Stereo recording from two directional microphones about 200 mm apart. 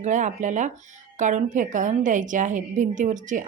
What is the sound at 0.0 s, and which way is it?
A woman's voice, 40° right (ahead or behind).